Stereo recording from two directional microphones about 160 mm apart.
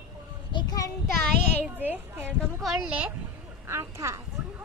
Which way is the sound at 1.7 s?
10° right (ahead or behind).